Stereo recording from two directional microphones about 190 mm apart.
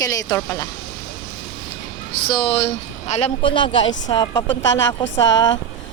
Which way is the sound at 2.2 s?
25° left (ahead or behind).